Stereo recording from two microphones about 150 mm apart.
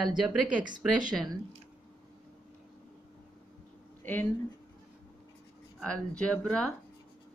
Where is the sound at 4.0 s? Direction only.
10° left (ahead or behind).